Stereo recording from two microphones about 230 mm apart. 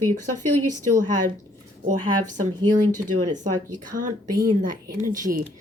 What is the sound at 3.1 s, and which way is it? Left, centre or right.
Speech, right.